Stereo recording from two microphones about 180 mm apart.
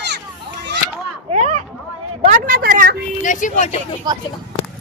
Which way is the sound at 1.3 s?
40° right (ahead or behind).